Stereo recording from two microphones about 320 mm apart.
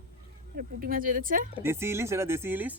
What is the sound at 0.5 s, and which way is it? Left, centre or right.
Speech, right.